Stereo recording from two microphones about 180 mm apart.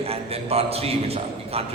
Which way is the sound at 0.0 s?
35° right (ahead or behind).